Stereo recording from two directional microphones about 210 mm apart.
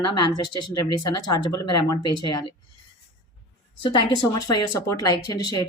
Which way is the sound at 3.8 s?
20° left (ahead or behind).